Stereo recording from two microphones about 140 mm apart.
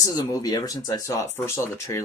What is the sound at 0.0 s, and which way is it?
Speech, 25° left (ahead or behind).